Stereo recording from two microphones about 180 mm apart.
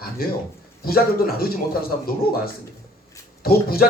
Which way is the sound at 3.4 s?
55° left (ahead or behind).